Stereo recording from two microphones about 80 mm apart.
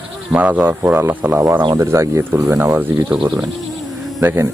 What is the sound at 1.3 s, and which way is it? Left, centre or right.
Speech, right.